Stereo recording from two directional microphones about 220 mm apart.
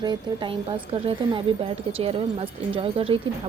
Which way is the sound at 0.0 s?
20° right (ahead or behind).